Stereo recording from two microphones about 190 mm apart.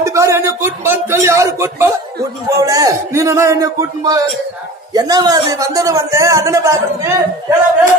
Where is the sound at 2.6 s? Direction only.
20° right (ahead or behind).